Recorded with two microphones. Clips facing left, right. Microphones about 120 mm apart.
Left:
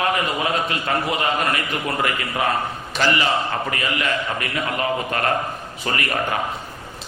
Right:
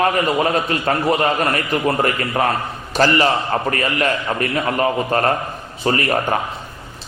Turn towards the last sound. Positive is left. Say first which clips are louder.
# right 6 dB
turn(degrees=-35)  # may be behind; listen again after turning